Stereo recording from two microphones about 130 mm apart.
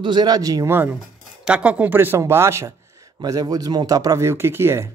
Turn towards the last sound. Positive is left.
turn(degrees=-20)  # may be behind; listen again after turning